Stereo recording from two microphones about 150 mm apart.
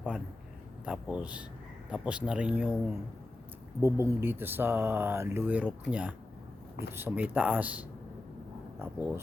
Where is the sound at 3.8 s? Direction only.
15° right (ahead or behind).